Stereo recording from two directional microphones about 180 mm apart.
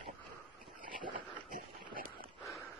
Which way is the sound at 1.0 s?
25° right (ahead or behind).